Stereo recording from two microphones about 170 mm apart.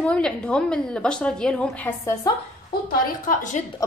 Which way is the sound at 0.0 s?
5° left (ahead or behind).